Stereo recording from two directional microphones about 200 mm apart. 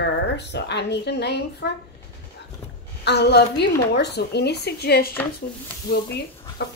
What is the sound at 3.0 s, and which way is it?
A woman's voice, 55° left (ahead or behind).